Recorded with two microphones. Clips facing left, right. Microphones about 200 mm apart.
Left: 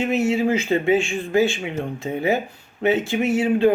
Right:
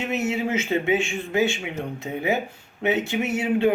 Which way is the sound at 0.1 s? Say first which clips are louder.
Left 4 dB; 20° right (ahead or behind).